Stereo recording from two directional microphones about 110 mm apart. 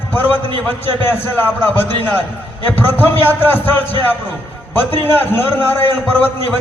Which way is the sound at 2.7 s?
20° left (ahead or behind).